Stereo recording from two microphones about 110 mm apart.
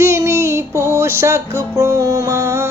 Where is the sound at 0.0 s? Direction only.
25° right (ahead or behind).